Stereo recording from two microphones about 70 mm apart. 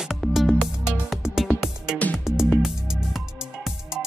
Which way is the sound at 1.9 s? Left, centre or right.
Centre.